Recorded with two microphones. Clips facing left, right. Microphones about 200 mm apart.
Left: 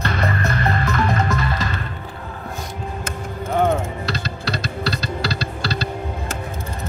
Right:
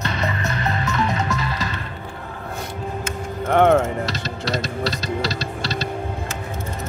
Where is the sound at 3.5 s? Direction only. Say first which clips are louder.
Right 4 dB; 70° right (ahead or behind).